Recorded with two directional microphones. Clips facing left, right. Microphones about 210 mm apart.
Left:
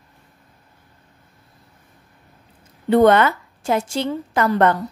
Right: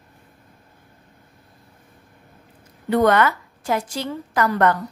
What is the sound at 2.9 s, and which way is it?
A woman's voice, 25° left (ahead or behind).